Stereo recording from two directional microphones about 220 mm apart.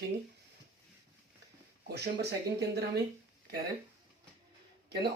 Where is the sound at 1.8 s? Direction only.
45° right (ahead or behind).